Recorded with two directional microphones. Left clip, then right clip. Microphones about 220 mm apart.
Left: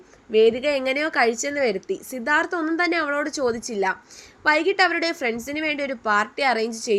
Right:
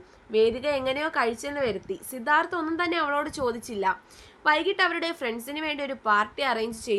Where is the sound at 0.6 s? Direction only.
10° left (ahead or behind).